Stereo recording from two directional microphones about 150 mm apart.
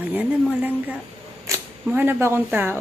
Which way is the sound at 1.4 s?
15° right (ahead or behind).